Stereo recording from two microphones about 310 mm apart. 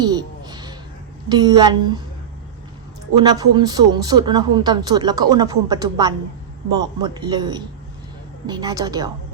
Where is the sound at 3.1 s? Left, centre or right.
Centre.